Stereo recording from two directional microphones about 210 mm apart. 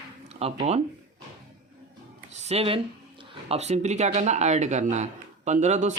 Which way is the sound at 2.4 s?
30° right (ahead or behind).